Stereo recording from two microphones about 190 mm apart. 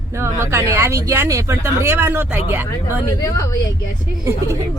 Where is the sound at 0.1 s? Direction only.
15° right (ahead or behind).